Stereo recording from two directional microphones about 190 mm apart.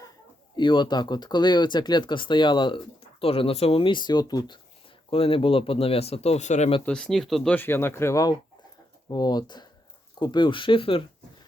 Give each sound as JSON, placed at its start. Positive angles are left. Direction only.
{"t": 0.5, "sound": "speech", "side_deg": 25}
{"t": 6.8, "sound": "speech", "side_deg": 5}